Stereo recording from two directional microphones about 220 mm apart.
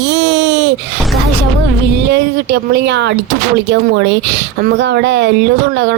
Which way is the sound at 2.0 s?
50° right (ahead or behind).